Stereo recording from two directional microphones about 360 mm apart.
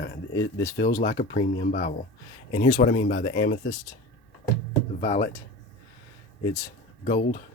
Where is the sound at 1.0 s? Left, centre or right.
Left.